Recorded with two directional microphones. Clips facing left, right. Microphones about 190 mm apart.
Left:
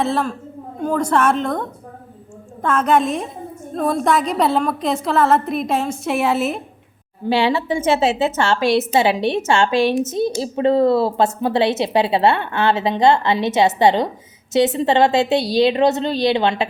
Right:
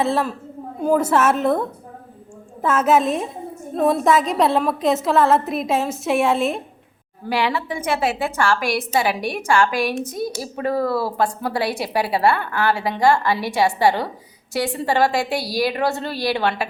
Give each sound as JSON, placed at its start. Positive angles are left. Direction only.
{"t": 0.0, "sound": "a woman's voice", "side_deg": 0}
{"t": 7.3, "sound": "a woman's voice", "side_deg": 25}